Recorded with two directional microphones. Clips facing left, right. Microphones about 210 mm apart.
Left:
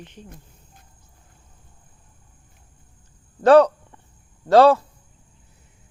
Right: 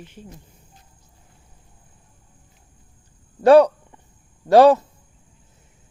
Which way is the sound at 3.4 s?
15° right (ahead or behind).